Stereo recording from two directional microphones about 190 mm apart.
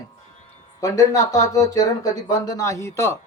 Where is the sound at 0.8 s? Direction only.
20° left (ahead or behind).